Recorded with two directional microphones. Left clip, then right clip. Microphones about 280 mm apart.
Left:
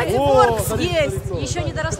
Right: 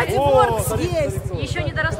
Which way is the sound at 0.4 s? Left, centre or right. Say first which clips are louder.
Left 2 dB; centre.